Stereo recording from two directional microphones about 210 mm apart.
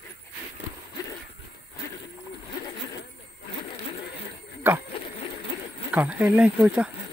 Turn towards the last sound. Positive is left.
turn(degrees=-5)  # may be behind; listen again after turning